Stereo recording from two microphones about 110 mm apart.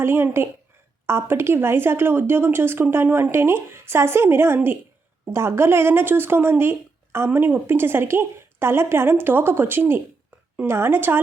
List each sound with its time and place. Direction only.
0.0 s speech: 25° right (ahead or behind)